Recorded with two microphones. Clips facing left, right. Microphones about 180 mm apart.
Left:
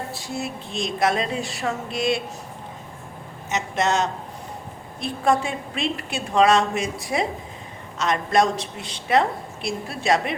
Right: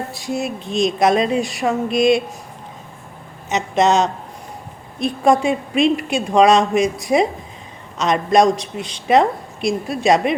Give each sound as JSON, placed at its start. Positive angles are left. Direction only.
{"t": 0.1, "sound": "a woman's voice", "side_deg": -15}
{"t": 3.5, "sound": "a woman's voice", "side_deg": -20}